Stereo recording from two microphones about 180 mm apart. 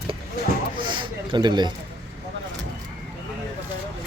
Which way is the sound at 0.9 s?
25° right (ahead or behind).